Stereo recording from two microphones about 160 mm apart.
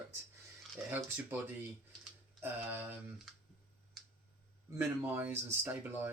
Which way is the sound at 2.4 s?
10° right (ahead or behind).